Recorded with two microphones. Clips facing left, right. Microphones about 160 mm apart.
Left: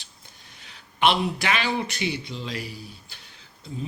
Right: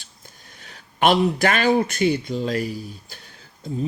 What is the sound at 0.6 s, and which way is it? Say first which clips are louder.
A man's voice: right 3 dB; 45° right (ahead or behind).